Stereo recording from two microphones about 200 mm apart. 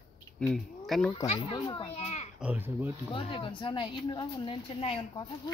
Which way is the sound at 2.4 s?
10° right (ahead or behind).